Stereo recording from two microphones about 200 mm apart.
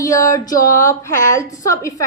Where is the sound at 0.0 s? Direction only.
15° left (ahead or behind).